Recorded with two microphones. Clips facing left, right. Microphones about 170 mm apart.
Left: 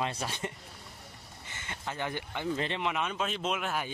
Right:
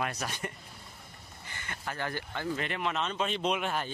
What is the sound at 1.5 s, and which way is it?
Speech, 20° left (ahead or behind).